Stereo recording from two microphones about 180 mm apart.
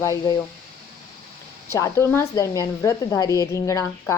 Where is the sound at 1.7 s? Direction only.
15° left (ahead or behind).